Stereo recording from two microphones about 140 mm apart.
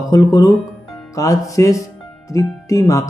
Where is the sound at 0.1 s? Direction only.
25° left (ahead or behind).